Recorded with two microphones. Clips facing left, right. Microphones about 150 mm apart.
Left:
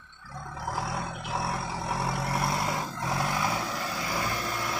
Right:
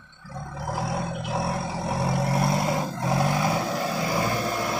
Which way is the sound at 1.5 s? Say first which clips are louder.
Right 4 dB; 30° right (ahead or behind).